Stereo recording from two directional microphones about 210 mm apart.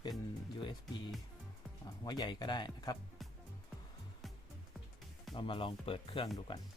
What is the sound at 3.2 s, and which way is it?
Music, centre (ahead or behind).